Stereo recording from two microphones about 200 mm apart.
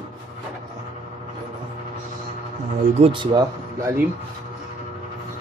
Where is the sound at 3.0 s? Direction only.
25° right (ahead or behind).